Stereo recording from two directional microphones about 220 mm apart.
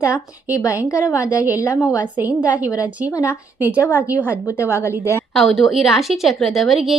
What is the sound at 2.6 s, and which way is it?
Speech, 15° left (ahead or behind).